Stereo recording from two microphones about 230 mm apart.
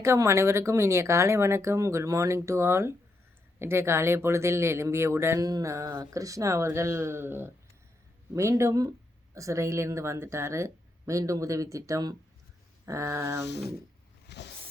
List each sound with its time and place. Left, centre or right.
0.0 s speech: centre
13.4 s speech: left
14.3 s vehicle: left